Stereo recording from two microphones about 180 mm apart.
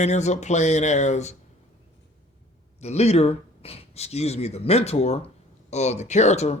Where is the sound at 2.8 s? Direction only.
35° left (ahead or behind).